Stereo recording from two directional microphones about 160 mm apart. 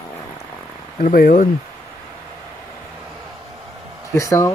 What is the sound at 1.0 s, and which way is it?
Speech, 60° left (ahead or behind).